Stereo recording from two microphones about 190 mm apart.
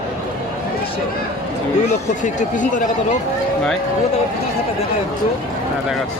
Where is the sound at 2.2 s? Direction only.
40° left (ahead or behind).